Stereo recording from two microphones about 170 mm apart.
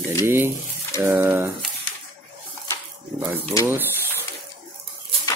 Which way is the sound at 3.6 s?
15° right (ahead or behind).